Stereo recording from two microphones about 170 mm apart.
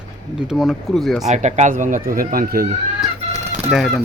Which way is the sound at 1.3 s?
45° right (ahead or behind).